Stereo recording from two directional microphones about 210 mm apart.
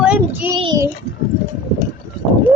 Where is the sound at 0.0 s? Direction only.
5° right (ahead or behind).